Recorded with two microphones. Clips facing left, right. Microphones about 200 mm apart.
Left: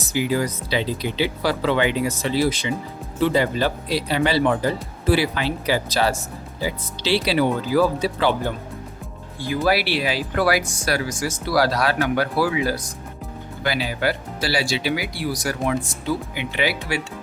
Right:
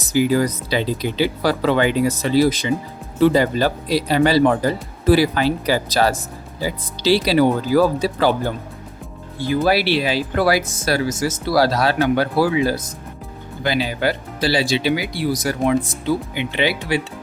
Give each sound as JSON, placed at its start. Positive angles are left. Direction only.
{"t": 0.1, "sound": "speech", "side_deg": -40}
{"t": 9.6, "sound": "speech", "side_deg": -25}
{"t": 10.6, "sound": "speech", "side_deg": -5}
{"t": 10.8, "sound": "speech", "side_deg": -25}